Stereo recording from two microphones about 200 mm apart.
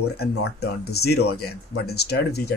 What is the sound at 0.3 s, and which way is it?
Speech, 55° left (ahead or behind).